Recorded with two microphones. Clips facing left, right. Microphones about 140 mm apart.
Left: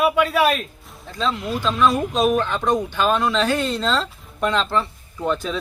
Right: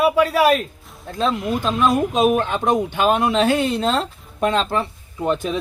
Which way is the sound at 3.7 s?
55° right (ahead or behind).